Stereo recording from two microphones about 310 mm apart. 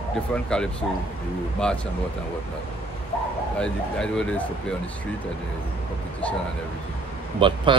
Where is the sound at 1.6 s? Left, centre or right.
Centre.